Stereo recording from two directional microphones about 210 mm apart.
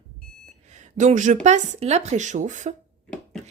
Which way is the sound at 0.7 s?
35° right (ahead or behind).